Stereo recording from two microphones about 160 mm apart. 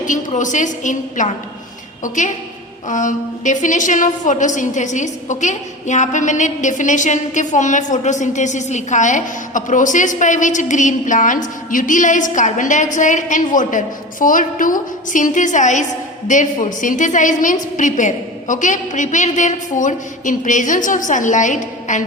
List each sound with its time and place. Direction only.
0.0 s a woman's voice: 50° left (ahead or behind)